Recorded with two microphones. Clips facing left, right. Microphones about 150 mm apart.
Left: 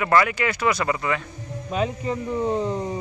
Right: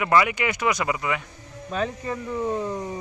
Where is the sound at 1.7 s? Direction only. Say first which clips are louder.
Left 2 dB; 15° left (ahead or behind).